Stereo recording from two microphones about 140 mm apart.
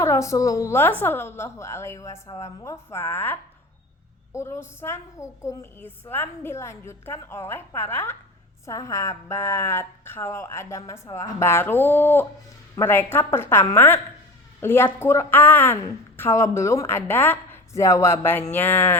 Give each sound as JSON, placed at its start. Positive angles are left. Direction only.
{"t": 0.0, "sound": "a woman's voice", "side_deg": 20}
{"t": 4.4, "sound": "a woman's voice", "side_deg": 20}